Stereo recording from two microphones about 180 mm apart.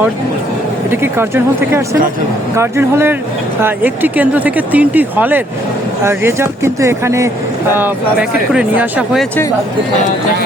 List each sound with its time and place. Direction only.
0.9 s speech: 10° right (ahead or behind)